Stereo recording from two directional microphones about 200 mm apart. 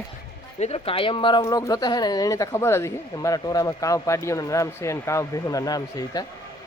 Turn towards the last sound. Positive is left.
turn(degrees=20)  # may be behind; listen again after turning